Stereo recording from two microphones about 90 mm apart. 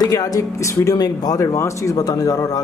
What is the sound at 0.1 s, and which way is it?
Speech, 40° left (ahead or behind).